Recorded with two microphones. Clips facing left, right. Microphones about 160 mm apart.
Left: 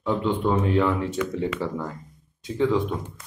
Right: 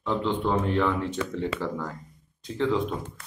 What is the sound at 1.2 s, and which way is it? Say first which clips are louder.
Speech: left 4 dB; 30° right (ahead or behind).